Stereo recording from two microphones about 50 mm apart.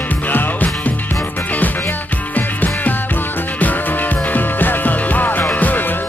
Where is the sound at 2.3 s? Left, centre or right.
Left.